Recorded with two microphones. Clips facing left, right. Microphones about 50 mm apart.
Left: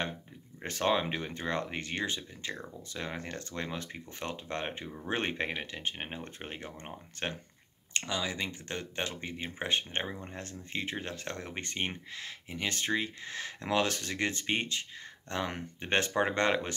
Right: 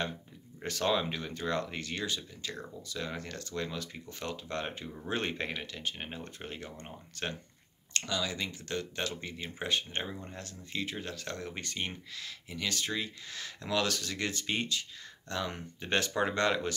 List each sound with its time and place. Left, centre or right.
0.7 s speech: left